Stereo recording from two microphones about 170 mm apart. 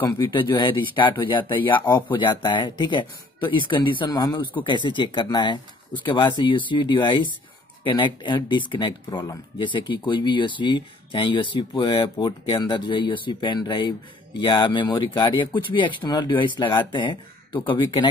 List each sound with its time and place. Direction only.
0.2 s speech: 30° left (ahead or behind)